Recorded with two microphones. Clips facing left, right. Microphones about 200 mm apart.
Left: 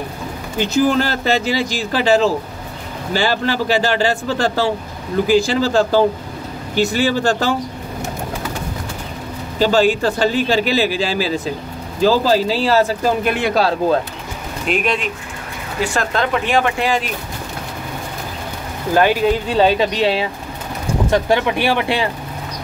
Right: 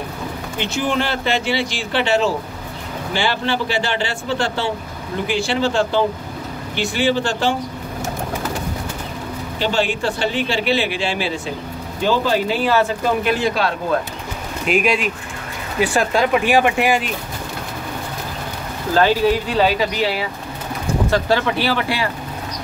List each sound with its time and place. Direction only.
0.6 s speech: 40° left (ahead or behind)
9.6 s speech: 40° left (ahead or behind)
14.7 s speech: 5° right (ahead or behind)
18.9 s speech: 20° left (ahead or behind)